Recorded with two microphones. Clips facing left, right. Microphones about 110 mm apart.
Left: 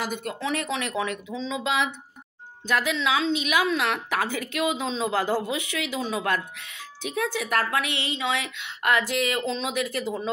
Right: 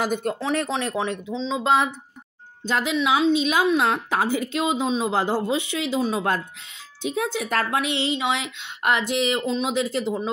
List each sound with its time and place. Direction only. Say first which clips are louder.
0.0 s speech: right 5 dB; 45° right (ahead or behind); by 1.6 s 25° right (ahead or behind)
1.6 s speech: right 6 dB; 40° right (ahead or behind)
2.6 s a woman's voice: right 2 dB; 25° right (ahead or behind)